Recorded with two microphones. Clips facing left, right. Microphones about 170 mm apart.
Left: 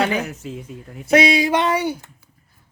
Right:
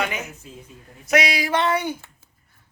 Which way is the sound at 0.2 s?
80° left.